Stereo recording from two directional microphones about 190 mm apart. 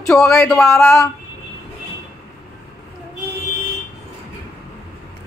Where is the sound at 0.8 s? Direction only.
15° left (ahead or behind).